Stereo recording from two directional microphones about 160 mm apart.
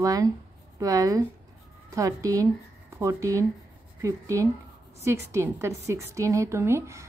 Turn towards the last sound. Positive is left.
turn(degrees=-15)  # may be behind; listen again after turning